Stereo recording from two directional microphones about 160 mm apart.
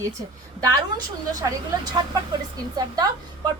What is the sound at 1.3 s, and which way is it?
A woman's voice, 25° right (ahead or behind).